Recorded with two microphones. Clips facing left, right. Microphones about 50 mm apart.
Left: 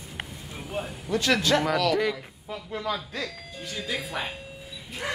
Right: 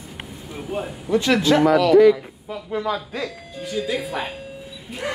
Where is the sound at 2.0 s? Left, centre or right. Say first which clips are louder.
Right 14 dB; centre.